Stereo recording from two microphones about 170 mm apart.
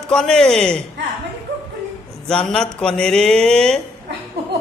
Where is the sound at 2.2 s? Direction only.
5° left (ahead or behind).